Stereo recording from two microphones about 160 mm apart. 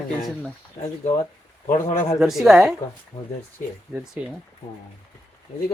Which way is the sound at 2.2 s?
Centre (ahead or behind).